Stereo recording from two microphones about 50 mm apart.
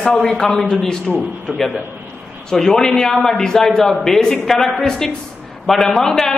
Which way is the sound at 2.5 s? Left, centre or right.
Centre.